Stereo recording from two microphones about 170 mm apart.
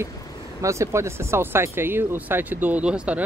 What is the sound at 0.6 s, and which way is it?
Speech, 15° right (ahead or behind).